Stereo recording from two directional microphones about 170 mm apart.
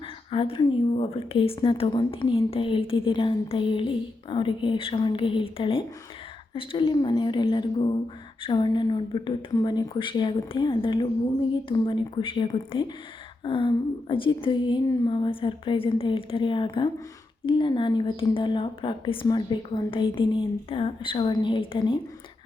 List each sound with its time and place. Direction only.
0.3 s a woman's voice: 30° left (ahead or behind)